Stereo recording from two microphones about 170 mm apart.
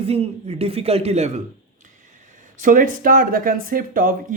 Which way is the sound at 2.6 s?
50° right (ahead or behind).